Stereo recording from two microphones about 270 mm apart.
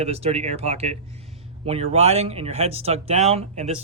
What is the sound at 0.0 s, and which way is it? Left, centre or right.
Speech, right.